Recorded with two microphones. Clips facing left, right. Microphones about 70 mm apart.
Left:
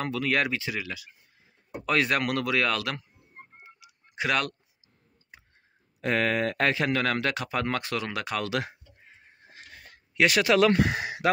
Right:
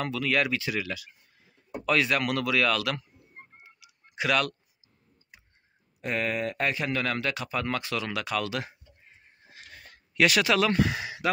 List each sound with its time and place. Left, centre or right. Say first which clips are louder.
0.0 s speech: even; left
0.5 s speech: right 2 dB; left
1.9 s speech: even; left
3.6 s a sound: left 3 dB; left
5.9 s speech: left 4 dB; left
7.6 s speech: left 1 dB; left
8.5 s speech: left 3 dB; left
9.8 s a sound: even; left
10.8 s speech: left 1 dB; left